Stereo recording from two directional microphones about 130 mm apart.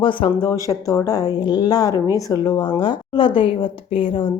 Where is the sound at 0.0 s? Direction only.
40° left (ahead or behind).